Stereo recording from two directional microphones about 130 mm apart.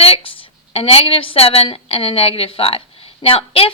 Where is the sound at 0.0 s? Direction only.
45° left (ahead or behind).